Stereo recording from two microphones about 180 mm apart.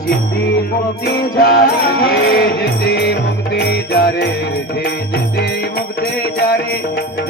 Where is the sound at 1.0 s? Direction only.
60° left (ahead or behind).